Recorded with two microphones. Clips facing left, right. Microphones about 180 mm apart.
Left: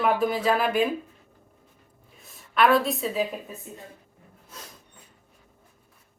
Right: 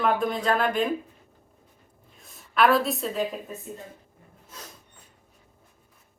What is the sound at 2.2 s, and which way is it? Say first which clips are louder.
A woman's voice: even; centre (ahead or behind).